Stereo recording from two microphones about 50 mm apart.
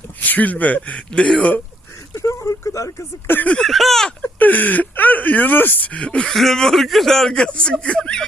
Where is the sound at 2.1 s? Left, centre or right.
Left.